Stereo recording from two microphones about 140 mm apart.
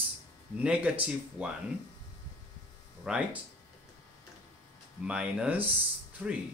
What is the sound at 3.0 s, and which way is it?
Speech, 5° right (ahead or behind).